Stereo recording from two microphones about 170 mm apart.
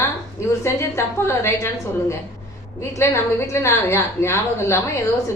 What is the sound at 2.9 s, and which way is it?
A woman's voice, 15° left (ahead or behind).